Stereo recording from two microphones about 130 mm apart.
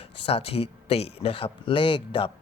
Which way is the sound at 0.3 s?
50° left (ahead or behind).